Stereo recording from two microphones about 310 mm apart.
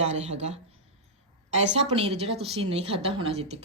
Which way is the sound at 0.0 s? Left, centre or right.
Right.